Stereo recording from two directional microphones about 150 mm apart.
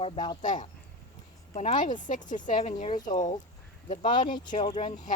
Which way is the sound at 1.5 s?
60° left (ahead or behind).